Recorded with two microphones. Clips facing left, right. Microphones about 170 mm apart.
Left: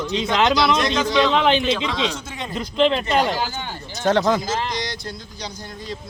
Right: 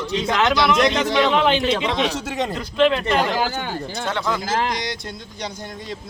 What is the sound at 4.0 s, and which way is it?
Speech, 40° left (ahead or behind).